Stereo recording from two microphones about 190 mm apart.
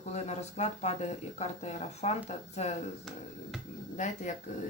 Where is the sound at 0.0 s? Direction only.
35° left (ahead or behind).